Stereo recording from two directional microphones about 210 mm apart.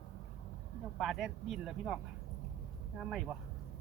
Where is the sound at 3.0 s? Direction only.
Centre (ahead or behind).